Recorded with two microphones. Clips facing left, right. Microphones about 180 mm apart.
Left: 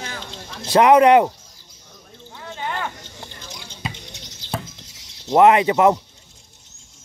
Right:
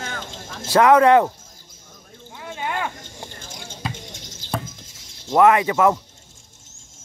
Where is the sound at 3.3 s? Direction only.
50° right (ahead or behind).